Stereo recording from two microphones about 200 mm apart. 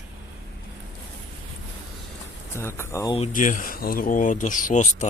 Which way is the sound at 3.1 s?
35° left (ahead or behind).